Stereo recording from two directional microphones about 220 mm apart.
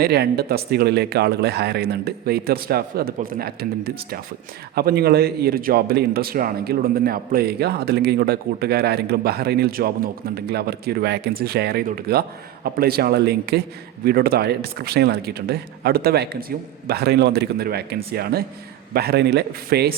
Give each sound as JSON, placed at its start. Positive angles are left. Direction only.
{"t": 0.0, "sound": "speech", "side_deg": -45}